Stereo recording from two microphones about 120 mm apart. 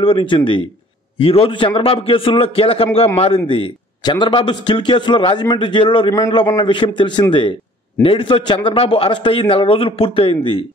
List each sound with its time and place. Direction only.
0.0 s a man's voice: 45° left (ahead or behind)
4.0 s a man's voice: 40° left (ahead or behind)